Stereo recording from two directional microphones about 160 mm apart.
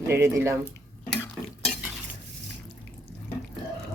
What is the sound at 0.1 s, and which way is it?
Speech, 15° right (ahead or behind).